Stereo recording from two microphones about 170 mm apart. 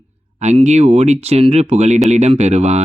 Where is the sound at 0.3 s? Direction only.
40° right (ahead or behind).